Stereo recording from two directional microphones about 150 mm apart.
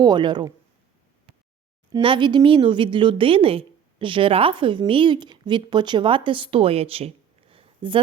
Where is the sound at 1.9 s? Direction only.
30° right (ahead or behind).